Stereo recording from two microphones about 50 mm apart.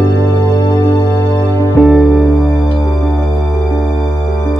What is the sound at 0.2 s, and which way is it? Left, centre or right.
Music, left.